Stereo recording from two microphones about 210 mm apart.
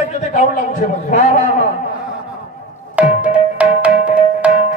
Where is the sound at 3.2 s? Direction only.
5° right (ahead or behind).